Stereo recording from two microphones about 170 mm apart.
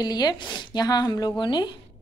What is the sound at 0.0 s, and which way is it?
A woman's voice, 25° left (ahead or behind).